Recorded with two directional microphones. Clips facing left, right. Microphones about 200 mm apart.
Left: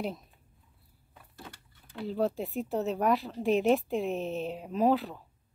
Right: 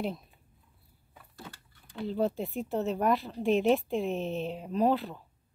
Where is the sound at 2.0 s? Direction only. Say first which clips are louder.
Even; centre (ahead or behind).